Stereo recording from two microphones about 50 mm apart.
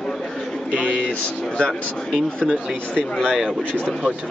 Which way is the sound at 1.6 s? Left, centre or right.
Left.